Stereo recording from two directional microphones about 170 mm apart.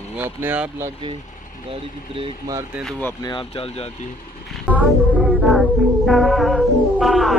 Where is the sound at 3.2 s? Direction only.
30° left (ahead or behind).